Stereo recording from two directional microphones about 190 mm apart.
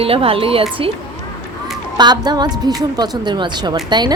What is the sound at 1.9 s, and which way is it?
Speech, 20° right (ahead or behind).